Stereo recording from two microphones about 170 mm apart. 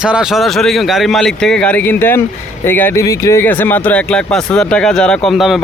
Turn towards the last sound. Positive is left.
turn(degrees=0)  # may be behind; listen again after turning